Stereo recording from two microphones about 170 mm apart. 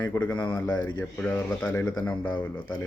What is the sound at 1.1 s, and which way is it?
Speech, 10° left (ahead or behind).